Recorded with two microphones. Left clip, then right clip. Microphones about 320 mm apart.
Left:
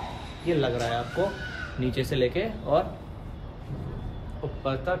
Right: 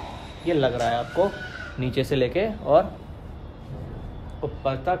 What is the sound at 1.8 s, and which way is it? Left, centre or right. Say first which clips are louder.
Speech: right 3 dB; right.